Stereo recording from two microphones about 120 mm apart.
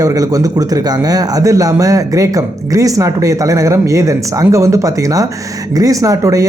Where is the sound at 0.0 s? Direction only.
30° right (ahead or behind).